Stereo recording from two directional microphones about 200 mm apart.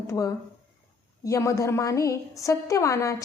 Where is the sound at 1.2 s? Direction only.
15° left (ahead or behind).